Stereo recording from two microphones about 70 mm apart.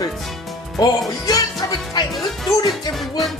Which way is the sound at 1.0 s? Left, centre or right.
Left.